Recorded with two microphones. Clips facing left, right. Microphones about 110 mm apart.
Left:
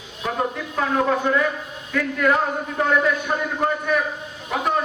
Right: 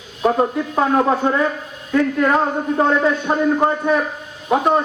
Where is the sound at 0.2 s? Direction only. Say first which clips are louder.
Right 8 dB; 35° right (ahead or behind).